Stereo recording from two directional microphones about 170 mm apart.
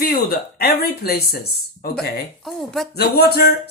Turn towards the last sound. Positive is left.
turn(degrees=70)  # may be behind; listen again after turning